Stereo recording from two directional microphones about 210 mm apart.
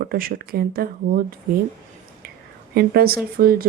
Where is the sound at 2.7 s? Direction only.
45° right (ahead or behind).